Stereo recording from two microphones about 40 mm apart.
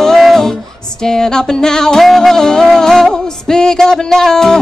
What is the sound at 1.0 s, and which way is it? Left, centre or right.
Music, centre.